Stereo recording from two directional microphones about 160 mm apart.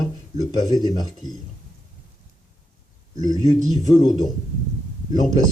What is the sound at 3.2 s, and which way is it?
Speech, 25° left (ahead or behind).